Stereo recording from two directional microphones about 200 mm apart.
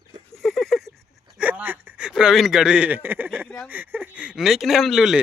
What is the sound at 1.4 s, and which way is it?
Speech, 10° right (ahead or behind).